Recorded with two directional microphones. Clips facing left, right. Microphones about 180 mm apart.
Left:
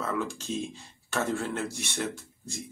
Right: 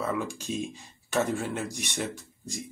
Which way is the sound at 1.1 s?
15° right (ahead or behind).